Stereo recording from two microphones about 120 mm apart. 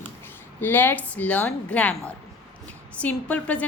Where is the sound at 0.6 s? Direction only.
15° left (ahead or behind).